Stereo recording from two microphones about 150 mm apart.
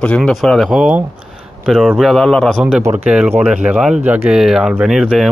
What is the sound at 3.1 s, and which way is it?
Speech, 10° right (ahead or behind).